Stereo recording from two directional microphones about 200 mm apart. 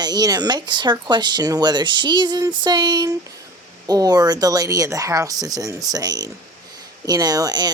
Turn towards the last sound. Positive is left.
turn(degrees=-20)  # may be behind; listen again after turning